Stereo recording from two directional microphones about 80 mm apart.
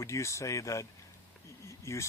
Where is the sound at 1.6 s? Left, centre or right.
Left.